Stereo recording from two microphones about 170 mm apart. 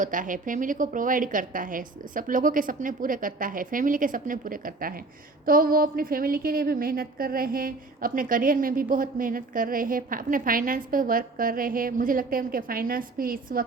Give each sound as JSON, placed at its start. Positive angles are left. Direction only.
{"t": 0.0, "sound": "a woman's voice", "side_deg": -50}